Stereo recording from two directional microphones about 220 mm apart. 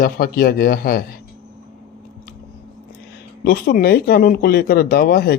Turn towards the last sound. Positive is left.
turn(degrees=45)  # may be behind; listen again after turning